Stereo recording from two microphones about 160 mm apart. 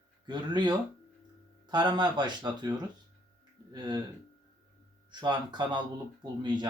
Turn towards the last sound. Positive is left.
turn(degrees=-30)  # may be behind; listen again after turning